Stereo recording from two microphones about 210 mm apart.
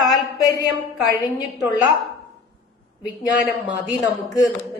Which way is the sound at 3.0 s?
5° right (ahead or behind).